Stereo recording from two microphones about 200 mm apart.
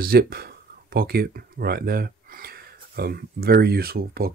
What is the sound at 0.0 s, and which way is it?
Speech, 50° right (ahead or behind).